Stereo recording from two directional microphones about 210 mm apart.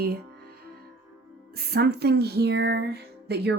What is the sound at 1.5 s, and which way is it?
Music, 50° right (ahead or behind).